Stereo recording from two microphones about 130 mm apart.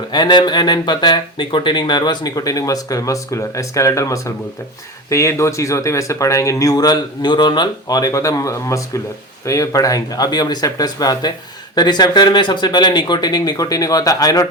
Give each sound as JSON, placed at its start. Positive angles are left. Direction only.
{"t": 0.1, "sound": "speech", "side_deg": 35}